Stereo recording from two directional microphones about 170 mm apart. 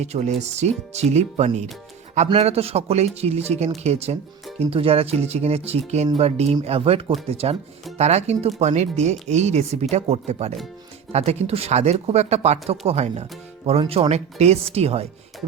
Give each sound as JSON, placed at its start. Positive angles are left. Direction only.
{"t": 0.0, "sound": "speech", "side_deg": -40}